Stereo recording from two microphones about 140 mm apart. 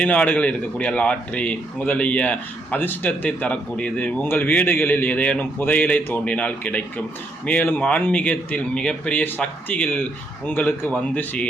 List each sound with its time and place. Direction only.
0.0 s a man's voice: 10° left (ahead or behind)